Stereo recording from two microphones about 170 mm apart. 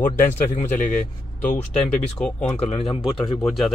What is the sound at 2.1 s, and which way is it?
Speech, 5° left (ahead or behind).